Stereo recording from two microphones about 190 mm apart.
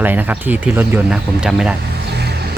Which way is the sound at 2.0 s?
60° right (ahead or behind).